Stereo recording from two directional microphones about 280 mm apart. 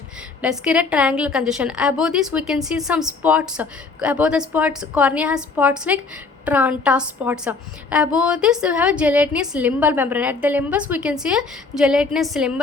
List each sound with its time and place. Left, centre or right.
0.4 s a woman's voice: centre